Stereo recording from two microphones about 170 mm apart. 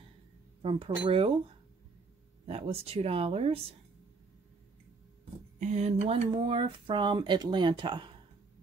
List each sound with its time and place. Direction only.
0.6 s speech: 30° right (ahead or behind)
2.4 s speech: 35° right (ahead or behind)
5.6 s speech: 45° right (ahead or behind)